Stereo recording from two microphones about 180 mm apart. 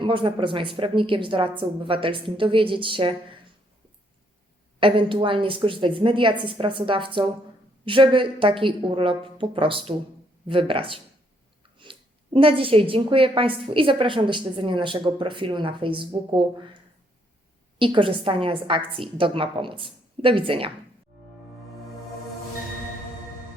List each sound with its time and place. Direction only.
0.0 s a woman's voice: 25° right (ahead or behind)
4.8 s a woman's voice: 30° right (ahead or behind)
17.7 s a woman's voice: 30° right (ahead or behind)